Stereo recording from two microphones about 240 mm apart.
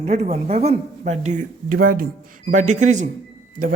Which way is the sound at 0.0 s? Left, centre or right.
Right.